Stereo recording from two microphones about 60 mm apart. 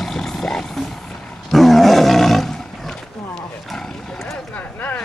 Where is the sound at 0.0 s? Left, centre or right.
Centre.